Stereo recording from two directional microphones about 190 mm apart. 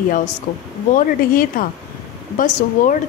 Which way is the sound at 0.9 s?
45° left (ahead or behind).